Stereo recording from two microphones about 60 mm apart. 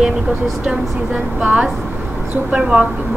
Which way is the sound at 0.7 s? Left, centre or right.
Right.